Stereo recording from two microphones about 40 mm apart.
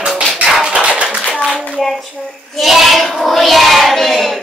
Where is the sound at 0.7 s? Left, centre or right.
Right.